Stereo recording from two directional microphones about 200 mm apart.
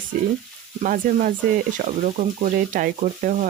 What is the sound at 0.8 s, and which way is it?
Speech, 40° right (ahead or behind).